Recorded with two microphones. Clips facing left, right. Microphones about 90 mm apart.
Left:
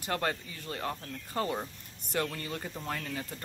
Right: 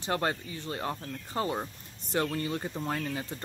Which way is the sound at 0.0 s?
25° right (ahead or behind).